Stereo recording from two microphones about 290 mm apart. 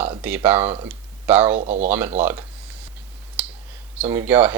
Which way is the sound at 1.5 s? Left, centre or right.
Right.